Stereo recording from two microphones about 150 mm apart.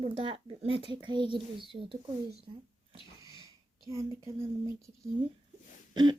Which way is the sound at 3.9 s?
20° right (ahead or behind).